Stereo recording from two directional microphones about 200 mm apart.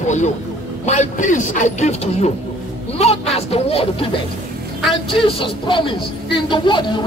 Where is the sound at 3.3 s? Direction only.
30° left (ahead or behind).